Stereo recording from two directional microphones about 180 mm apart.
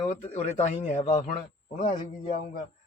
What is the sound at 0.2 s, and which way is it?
A man's voice, 40° left (ahead or behind).